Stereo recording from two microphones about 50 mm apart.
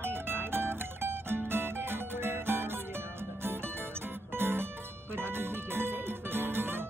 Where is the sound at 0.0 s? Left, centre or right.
Right.